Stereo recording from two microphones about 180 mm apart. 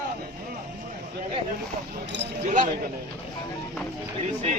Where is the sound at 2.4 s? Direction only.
45° right (ahead or behind).